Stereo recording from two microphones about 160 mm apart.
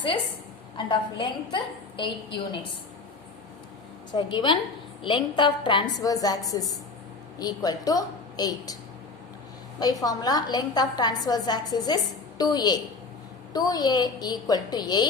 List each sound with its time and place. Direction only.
0.9 s a woman's voice: 30° left (ahead or behind)
4.1 s a woman's voice: 30° left (ahead or behind)
9.8 s a woman's voice: 25° left (ahead or behind)